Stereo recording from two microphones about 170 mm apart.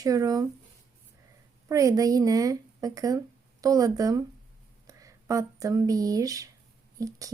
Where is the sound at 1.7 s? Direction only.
20° right (ahead or behind).